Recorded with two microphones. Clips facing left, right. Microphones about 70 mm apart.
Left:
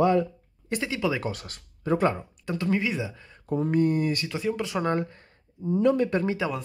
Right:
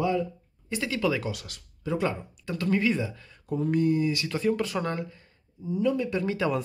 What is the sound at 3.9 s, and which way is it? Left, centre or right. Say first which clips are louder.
Speech: even; left.